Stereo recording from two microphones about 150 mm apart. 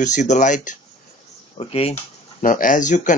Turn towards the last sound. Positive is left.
turn(degrees=55)  # may be behind; listen again after turning